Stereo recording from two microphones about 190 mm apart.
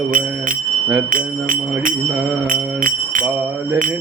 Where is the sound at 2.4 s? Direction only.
45° right (ahead or behind).